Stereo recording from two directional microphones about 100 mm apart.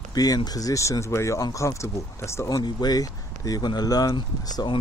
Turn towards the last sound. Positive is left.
turn(degrees=45)  # may be behind; listen again after turning